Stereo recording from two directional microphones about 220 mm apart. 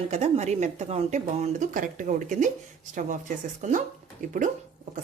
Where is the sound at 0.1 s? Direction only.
30° right (ahead or behind).